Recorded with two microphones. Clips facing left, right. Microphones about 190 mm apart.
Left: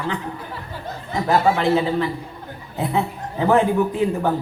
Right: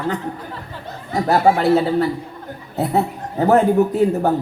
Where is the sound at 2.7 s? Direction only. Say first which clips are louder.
Right 3 dB; 40° right (ahead or behind).